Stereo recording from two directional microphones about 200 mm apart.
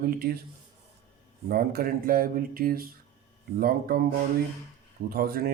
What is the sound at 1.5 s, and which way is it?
Speech, 50° right (ahead or behind).